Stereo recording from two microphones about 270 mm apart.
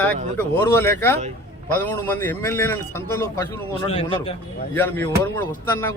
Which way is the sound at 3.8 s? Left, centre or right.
Centre.